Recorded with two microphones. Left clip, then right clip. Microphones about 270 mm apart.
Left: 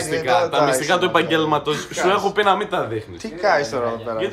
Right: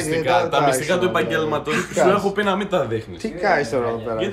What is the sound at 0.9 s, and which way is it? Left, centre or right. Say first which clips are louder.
Speech: left 2 dB; left.